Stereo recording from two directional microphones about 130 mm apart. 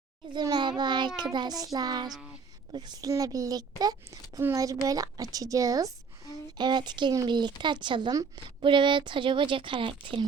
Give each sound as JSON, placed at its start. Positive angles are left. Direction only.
{"t": 0.3, "sound": "child singing", "side_deg": -30}
{"t": 2.7, "sound": "a woman's voice", "side_deg": -30}
{"t": 6.6, "sound": "child singing", "side_deg": -35}